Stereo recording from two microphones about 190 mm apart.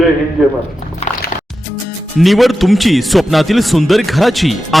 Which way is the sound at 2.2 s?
Centre (ahead or behind).